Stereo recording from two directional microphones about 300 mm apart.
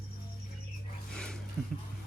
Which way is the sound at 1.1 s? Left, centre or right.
Centre.